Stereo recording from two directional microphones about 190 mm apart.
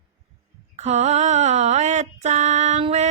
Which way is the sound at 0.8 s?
35° right (ahead or behind).